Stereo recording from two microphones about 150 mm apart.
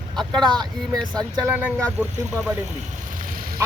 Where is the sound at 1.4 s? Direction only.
15° right (ahead or behind).